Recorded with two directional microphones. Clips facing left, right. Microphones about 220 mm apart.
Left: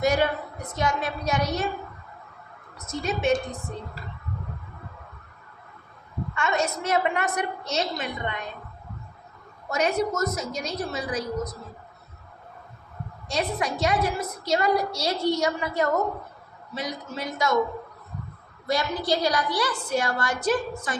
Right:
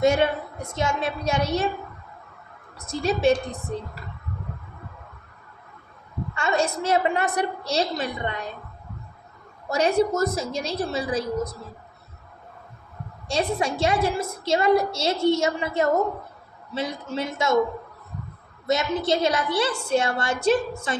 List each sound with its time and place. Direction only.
0.0 s a woman's voice: 25° right (ahead or behind)
2.7 s a woman's voice: 30° right (ahead or behind)
6.3 s a woman's voice: 30° right (ahead or behind)
9.6 s a woman's voice: 30° right (ahead or behind)
13.2 s a woman's voice: 30° right (ahead or behind)
18.7 s a woman's voice: 25° right (ahead or behind)